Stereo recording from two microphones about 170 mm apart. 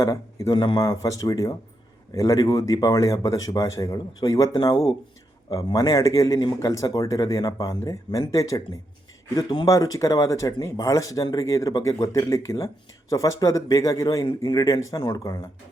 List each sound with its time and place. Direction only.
0.0 s speech: 20° left (ahead or behind)